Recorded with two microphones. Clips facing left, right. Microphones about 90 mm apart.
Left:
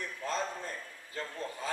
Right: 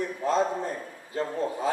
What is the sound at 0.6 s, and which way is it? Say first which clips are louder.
A man's voice: right 9 dB; 40° right (ahead or behind).